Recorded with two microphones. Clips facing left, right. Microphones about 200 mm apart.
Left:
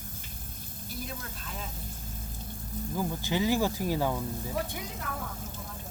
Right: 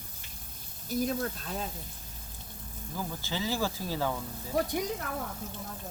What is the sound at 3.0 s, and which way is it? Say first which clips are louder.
Speech: left 5 dB; 15° left (ahead or behind).